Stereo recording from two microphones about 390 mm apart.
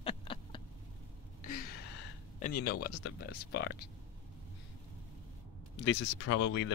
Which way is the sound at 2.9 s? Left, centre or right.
Left.